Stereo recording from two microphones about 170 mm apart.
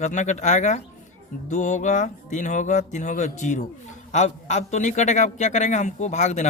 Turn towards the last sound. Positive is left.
turn(degrees=45)  # may be behind; listen again after turning